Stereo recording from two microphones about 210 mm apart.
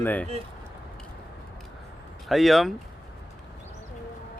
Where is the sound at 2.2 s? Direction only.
Centre (ahead or behind).